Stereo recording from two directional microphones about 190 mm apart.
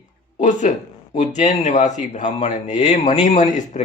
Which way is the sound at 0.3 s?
40° left (ahead or behind).